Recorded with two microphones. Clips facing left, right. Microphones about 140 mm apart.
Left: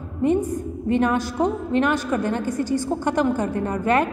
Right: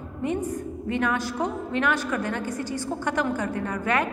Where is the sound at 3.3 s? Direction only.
30° left (ahead or behind).